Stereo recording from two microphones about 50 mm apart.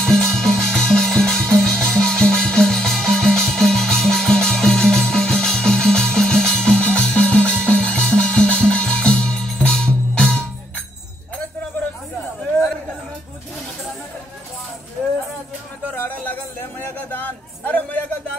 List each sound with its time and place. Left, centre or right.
0.0 s music: centre
15.9 s music: left
16.8 s a sound: left